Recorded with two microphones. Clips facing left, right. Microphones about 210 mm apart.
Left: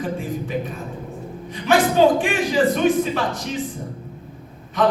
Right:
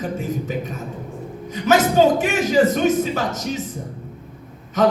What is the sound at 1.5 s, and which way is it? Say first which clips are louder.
A man's voice: right 1 dB; 45° right (ahead or behind).